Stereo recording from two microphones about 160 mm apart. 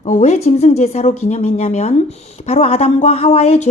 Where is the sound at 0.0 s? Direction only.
45° left (ahead or behind).